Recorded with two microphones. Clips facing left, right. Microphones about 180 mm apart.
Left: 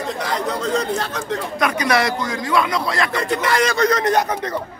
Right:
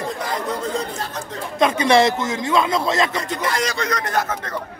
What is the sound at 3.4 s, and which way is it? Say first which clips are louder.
Speech: left 3 dB; 65° left (ahead or behind).